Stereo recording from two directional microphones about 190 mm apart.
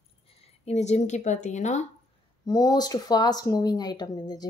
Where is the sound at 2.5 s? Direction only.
20° left (ahead or behind).